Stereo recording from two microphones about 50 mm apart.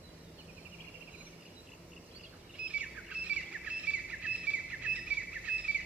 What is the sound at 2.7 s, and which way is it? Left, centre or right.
Bird, right.